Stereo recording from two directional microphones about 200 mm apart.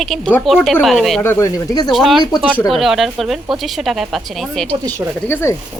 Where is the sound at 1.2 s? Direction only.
15° left (ahead or behind).